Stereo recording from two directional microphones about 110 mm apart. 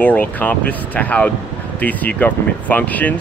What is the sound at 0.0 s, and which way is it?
Speech, 15° left (ahead or behind).